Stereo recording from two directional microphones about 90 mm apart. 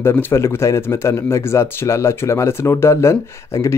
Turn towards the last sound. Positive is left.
turn(degrees=35)  # may be behind; listen again after turning